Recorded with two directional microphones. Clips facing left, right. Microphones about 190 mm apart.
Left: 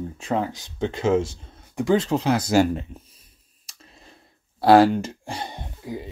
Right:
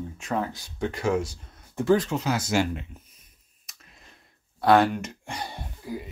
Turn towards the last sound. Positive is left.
turn(degrees=20)  # may be behind; listen again after turning